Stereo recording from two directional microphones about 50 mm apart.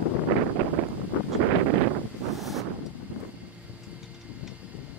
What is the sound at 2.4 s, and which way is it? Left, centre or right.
Wind, centre.